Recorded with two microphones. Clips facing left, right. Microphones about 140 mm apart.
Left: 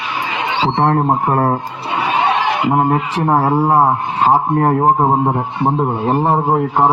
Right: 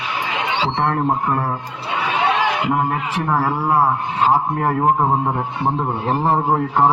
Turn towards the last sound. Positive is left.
turn(degrees=15)  # may be behind; listen again after turning